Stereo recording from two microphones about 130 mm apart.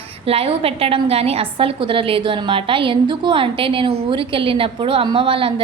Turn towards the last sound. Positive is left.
turn(degrees=-45)  # may be behind; listen again after turning